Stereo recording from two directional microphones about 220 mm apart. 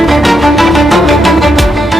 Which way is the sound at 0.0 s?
Centre (ahead or behind).